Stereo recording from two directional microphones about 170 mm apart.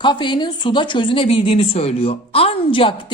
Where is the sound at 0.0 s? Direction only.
30° left (ahead or behind).